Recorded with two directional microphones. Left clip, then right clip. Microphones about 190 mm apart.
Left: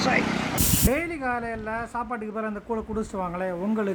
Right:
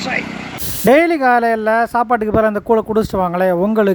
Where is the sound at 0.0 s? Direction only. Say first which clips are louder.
Right 3 dB; 5° left (ahead or behind).